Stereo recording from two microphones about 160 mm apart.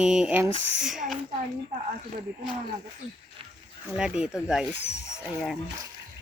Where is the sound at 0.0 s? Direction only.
5° right (ahead or behind).